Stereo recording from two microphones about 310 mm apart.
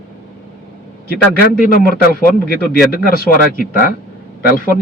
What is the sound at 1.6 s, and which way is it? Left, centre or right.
A man's voice, left.